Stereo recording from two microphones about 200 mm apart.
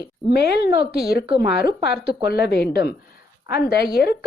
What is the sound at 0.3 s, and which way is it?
Speech, 55° left (ahead or behind).